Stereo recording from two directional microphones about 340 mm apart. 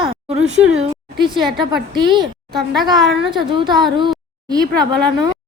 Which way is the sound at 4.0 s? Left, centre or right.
Centre.